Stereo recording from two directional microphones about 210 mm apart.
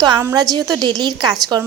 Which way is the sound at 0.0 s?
15° right (ahead or behind).